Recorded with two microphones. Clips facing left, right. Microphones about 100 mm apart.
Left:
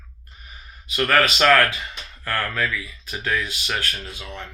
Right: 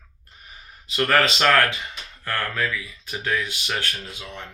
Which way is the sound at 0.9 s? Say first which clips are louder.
Left 1 dB; 25° right (ahead or behind).